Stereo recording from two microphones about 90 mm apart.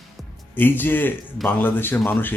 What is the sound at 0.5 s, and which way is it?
Speech, 20° left (ahead or behind).